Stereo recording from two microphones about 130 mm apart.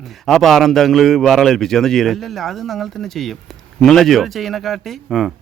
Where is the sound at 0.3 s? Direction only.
Centre (ahead or behind).